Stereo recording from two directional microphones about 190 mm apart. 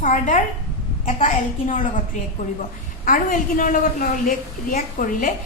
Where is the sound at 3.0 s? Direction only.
45° left (ahead or behind).